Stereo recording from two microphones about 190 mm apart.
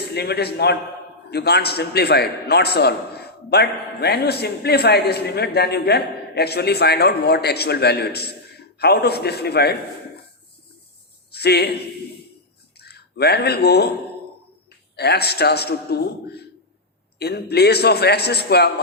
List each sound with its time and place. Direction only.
0.0 s a man's voice: 60° left (ahead or behind)
11.3 s a man's voice: 55° left (ahead or behind)
12.7 s speech: 55° left (ahead or behind)
14.9 s a man's voice: 60° left (ahead or behind)